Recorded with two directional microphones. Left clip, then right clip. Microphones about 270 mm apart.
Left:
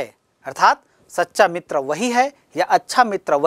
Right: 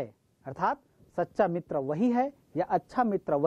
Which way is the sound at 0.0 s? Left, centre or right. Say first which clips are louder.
Left 10 dB; centre.